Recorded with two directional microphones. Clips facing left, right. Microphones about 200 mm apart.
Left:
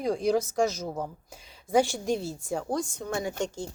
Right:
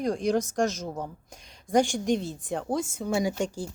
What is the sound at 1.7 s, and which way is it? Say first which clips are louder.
A woman's voice: right 1 dB; centre (ahead or behind).